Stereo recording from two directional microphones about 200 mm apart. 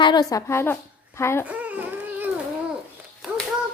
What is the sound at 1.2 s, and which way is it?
Speech, 15° left (ahead or behind).